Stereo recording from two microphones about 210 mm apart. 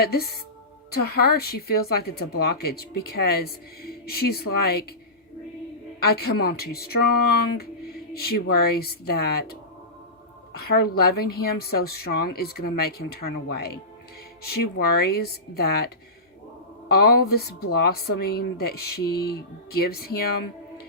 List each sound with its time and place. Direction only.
0.0 s a woman's voice: 50° left (ahead or behind)
6.0 s a woman's voice: 50° left (ahead or behind)
8.1 s a woman's voice: 50° left (ahead or behind)
10.6 s a woman's voice: 50° left (ahead or behind)
16.9 s a woman's voice: 45° left (ahead or behind)